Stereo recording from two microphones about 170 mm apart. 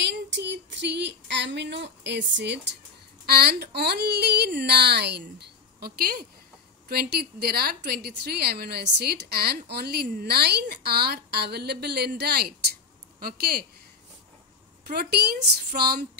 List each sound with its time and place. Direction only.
0.0 s a sound: 90° right
3.3 s a woman's voice: 65° right (ahead or behind)
14.9 s a woman's voice: 65° right (ahead or behind)